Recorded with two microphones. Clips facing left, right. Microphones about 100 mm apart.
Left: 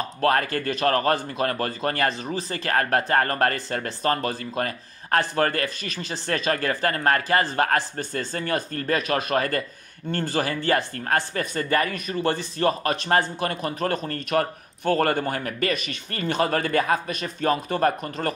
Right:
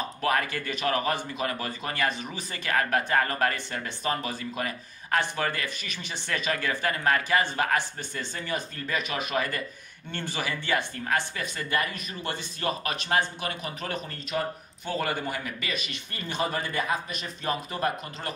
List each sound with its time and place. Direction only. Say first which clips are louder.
0.2 s speech: left 6 dB; 45° left (ahead or behind)
1.8 s speech: left 4 dB; 40° left (ahead or behind)
10.1 s speech: left 7 dB; 40° left (ahead or behind)
16.2 s speech: left 7 dB; 70° left (ahead or behind)